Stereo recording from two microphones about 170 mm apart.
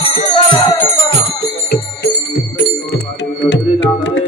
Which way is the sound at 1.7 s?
80° left.